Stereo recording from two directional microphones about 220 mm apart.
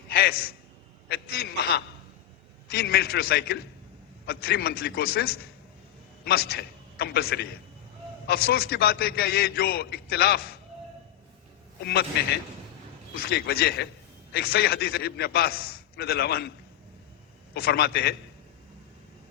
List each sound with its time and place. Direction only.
0.1 s a sound: 45° left (ahead or behind)
1.0 s a man's voice: 45° left (ahead or behind)
11.8 s a man's voice: 50° left (ahead or behind)
13.1 s a man's voice: 45° left (ahead or behind)
17.5 s a man's voice: 45° left (ahead or behind)